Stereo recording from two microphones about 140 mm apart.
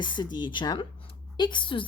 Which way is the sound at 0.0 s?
35° left (ahead or behind).